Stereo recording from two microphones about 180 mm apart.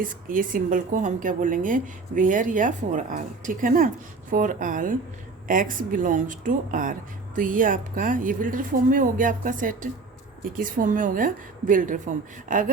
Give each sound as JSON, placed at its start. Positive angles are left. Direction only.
{"t": 0.0, "sound": "speech", "side_deg": -50}